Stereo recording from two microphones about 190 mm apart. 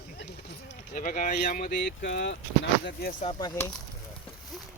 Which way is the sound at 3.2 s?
25° left (ahead or behind).